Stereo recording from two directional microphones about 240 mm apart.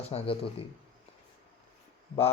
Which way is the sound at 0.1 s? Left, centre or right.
Left.